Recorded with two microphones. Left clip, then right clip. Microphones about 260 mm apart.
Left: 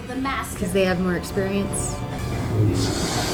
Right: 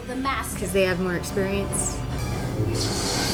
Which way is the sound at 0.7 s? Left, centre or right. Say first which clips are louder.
Left 1 dB; right.